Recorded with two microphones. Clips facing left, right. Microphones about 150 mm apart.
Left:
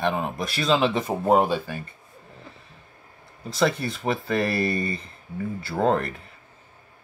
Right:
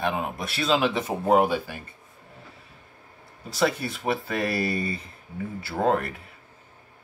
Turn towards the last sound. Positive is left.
turn(degrees=-5)  # may be behind; listen again after turning